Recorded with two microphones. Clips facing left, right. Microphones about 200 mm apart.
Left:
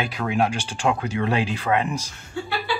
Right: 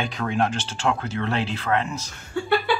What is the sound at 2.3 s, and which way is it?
Speech, 55° right (ahead or behind).